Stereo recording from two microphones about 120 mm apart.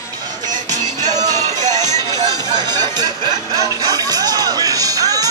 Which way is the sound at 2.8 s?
35° right (ahead or behind).